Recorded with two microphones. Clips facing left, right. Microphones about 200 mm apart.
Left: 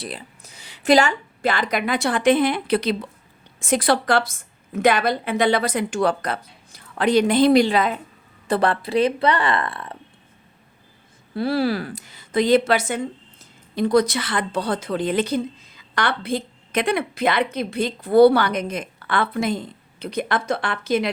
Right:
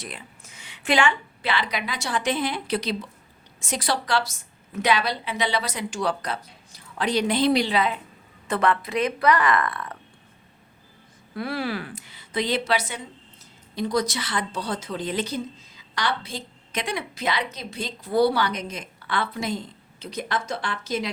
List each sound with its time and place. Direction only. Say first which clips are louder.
0.0 s a woman's voice: left 5 dB; 35° left (ahead or behind)
8.4 s speech: left 3 dB; 35° left (ahead or behind)
11.3 s a woman's voice: left 7 dB; 35° left (ahead or behind); by 21.1 s 60° left (ahead or behind)